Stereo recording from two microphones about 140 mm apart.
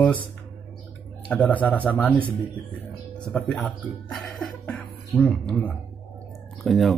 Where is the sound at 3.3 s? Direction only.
5° left (ahead or behind).